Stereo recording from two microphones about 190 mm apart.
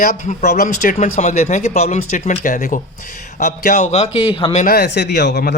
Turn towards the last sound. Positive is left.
turn(degrees=60)  # may be behind; listen again after turning